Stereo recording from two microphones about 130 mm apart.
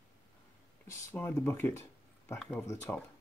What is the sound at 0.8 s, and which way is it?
Speech, 20° left (ahead or behind).